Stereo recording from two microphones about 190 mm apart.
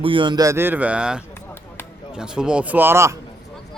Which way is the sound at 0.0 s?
25° right (ahead or behind).